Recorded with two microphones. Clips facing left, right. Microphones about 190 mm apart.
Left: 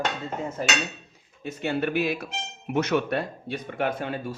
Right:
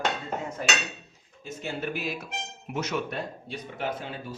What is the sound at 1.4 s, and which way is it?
Speech, 65° left (ahead or behind).